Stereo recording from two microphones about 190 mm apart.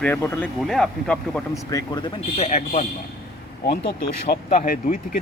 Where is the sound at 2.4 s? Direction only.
35° left (ahead or behind).